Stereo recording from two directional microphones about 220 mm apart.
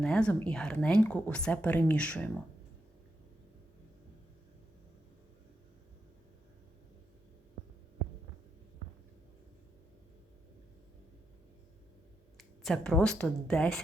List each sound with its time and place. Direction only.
0.0 s a woman's voice: 5° left (ahead or behind)
12.4 s speech: centre (ahead or behind)